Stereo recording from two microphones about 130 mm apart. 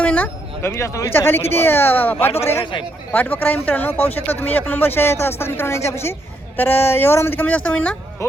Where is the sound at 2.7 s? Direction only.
40° left (ahead or behind).